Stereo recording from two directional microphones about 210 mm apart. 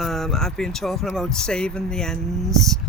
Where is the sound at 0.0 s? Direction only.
Centre (ahead or behind).